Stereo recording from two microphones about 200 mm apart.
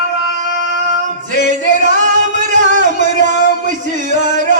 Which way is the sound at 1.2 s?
40° right (ahead or behind).